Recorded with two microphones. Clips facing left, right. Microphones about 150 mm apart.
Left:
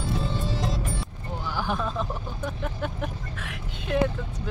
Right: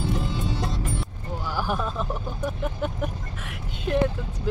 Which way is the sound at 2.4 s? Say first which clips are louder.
Right 3 dB; 10° right (ahead or behind).